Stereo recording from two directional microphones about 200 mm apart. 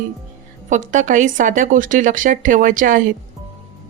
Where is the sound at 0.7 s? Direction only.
40° right (ahead or behind).